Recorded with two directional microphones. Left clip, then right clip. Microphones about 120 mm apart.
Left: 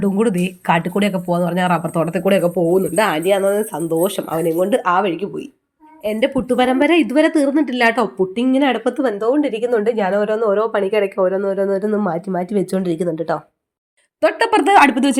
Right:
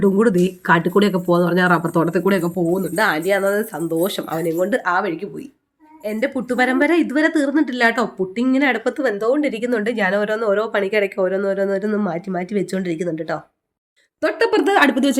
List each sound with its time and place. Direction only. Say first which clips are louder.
0.0 s a woman's voice: right 2 dB; 15° left (ahead or behind)
4.7 s a woman's voice: left 3 dB; 25° left (ahead or behind)
14.2 s a woman's voice: left 3 dB; 35° left (ahead or behind); by 15.2 s 15° left (ahead or behind)